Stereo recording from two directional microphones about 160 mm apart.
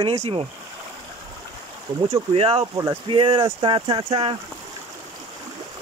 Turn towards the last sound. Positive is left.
turn(degrees=-35)  # may be behind; listen again after turning